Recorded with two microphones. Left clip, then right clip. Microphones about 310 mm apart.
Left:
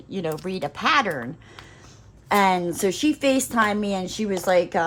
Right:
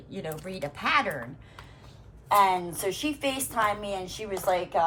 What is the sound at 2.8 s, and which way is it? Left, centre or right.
A woman's voice, left.